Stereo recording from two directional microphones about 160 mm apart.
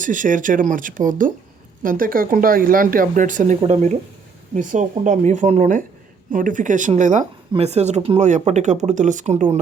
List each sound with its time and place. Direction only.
0.0 s speech: 55° right (ahead or behind)